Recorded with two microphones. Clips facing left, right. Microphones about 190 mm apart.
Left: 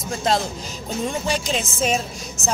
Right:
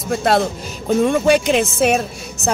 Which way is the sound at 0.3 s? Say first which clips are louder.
Right 4 dB; 60° right (ahead or behind).